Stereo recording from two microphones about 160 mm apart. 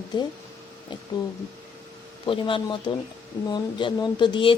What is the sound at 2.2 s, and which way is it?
A man's voice, 30° left (ahead or behind).